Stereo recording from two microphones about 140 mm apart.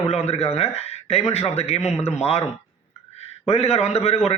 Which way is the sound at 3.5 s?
50° left (ahead or behind).